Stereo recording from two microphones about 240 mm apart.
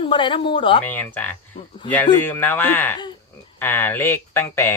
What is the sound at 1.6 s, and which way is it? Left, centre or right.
Speech, left.